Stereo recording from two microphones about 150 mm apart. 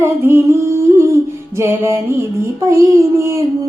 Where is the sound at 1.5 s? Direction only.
15° right (ahead or behind).